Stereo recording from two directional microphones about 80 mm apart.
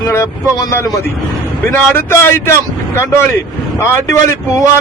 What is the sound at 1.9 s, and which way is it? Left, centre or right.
A man's voice, left.